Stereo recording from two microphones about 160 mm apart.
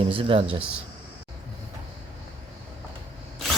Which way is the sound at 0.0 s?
35° right (ahead or behind).